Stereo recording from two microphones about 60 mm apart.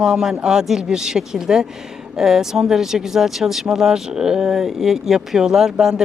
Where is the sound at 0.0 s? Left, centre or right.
Centre.